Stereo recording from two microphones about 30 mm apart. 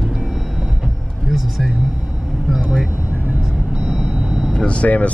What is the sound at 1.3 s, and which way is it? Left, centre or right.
Speech, centre.